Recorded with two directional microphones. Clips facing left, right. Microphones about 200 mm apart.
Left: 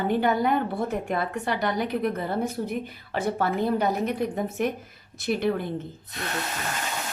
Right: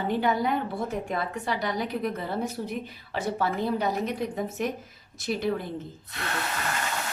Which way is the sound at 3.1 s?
55° left (ahead or behind).